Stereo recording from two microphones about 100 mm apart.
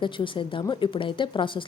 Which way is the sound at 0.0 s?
55° left (ahead or behind).